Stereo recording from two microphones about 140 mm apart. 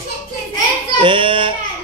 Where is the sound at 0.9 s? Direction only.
35° right (ahead or behind).